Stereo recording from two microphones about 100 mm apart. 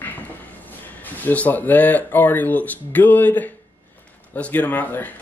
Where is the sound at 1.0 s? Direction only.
15° left (ahead or behind).